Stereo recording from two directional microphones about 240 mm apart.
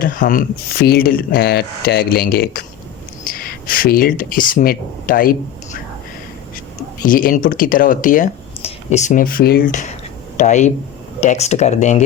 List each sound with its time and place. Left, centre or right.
0.0 s speech: left
7.0 s speech: left